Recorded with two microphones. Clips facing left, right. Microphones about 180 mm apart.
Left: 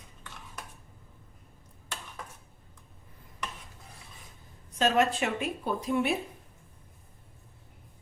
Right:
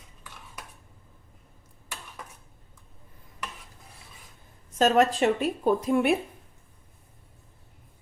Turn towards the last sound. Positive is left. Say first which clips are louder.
# right 6 dB
turn(degrees=-50)  # may be behind; listen again after turning